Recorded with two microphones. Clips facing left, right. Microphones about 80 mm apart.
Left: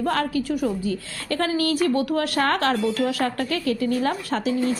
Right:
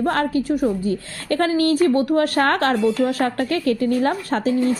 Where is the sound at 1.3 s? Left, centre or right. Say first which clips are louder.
Right 5 dB; right.